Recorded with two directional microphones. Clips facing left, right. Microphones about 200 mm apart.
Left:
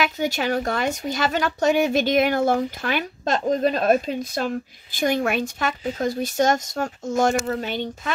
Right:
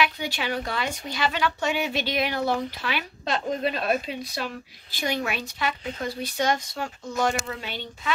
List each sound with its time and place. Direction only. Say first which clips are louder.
0.0 s speech: left 4 dB; 45° left (ahead or behind)